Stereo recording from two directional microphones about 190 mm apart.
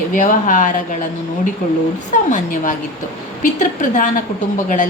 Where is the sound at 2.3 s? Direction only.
40° left (ahead or behind).